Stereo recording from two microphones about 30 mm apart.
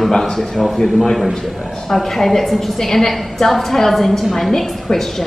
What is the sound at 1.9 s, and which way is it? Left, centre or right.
A woman's voice, centre.